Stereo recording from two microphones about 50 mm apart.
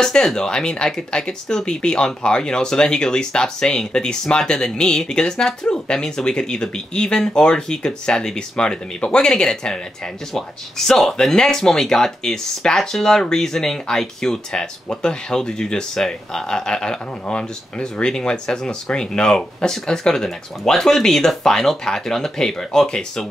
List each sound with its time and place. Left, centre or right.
0.0 s speech: centre